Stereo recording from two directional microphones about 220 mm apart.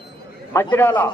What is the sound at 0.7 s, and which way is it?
Speech, 10° left (ahead or behind).